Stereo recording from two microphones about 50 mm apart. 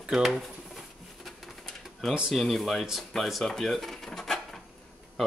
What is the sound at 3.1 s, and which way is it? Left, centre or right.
Drawer open or close, centre.